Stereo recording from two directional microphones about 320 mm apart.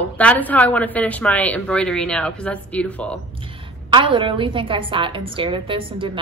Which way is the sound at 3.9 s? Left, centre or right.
Centre.